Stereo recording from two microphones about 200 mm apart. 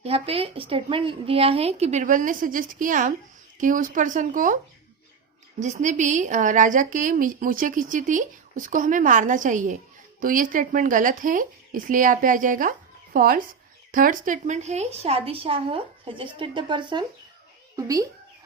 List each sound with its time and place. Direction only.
0.0 s a woman's voice: 30° right (ahead or behind)
5.5 s a woman's voice: 35° right (ahead or behind); by 18.1 s 15° right (ahead or behind)